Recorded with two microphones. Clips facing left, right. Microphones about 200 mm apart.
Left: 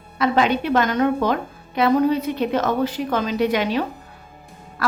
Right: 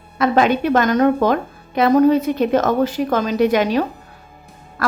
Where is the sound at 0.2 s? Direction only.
45° right (ahead or behind).